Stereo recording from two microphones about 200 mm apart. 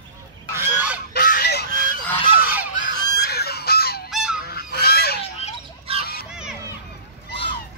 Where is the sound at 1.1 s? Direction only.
50° left (ahead or behind).